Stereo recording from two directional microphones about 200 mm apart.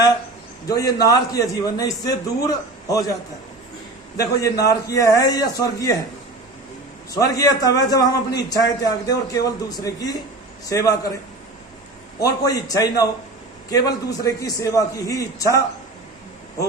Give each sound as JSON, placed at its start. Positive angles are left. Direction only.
{"t": 0.7, "sound": "a man's voice", "side_deg": 20}
{"t": 4.2, "sound": "a man's voice", "side_deg": 15}
{"t": 7.1, "sound": "a man's voice", "side_deg": 20}
{"t": 12.2, "sound": "a man's voice", "side_deg": 20}